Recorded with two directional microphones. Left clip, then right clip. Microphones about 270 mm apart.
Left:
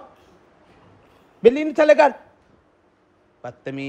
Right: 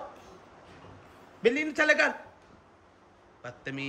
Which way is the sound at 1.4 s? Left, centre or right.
Centre.